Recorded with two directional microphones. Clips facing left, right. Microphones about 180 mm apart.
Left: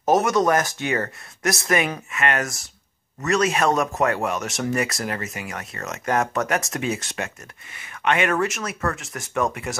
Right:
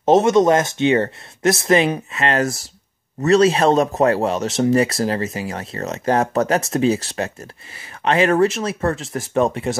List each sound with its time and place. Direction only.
0.0 s speech: 25° right (ahead or behind)